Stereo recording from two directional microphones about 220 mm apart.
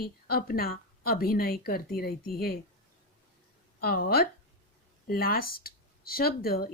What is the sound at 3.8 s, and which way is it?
Speech, 45° left (ahead or behind).